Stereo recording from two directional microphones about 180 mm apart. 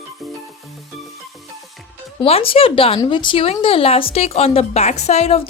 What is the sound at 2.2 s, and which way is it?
Speech, 30° left (ahead or behind).